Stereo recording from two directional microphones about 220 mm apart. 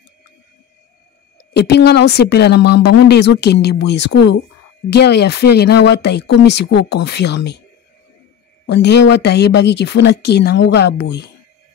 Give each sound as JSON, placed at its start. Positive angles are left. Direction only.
{"t": 1.5, "sound": "speech", "side_deg": 50}
{"t": 8.6, "sound": "speech", "side_deg": 50}